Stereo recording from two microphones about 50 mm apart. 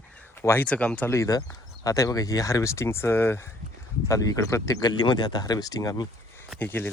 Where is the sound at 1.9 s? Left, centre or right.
Left.